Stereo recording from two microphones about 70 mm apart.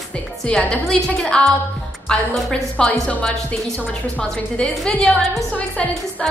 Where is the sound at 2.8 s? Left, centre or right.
Centre.